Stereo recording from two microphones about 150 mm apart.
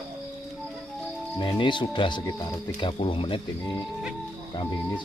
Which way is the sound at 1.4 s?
30° left (ahead or behind).